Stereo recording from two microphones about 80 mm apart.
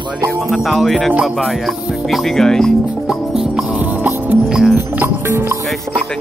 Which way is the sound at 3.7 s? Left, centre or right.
Centre.